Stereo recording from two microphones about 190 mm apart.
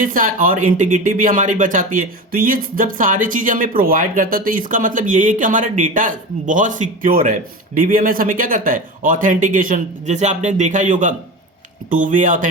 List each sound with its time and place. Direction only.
0.0 s speech: 45° right (ahead or behind)